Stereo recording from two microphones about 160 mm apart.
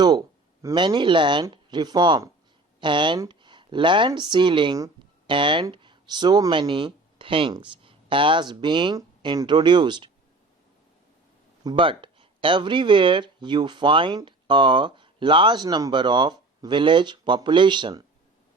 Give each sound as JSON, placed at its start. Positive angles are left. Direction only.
{"t": 0.0, "sound": "speech", "side_deg": -25}
{"t": 11.6, "sound": "speech", "side_deg": -30}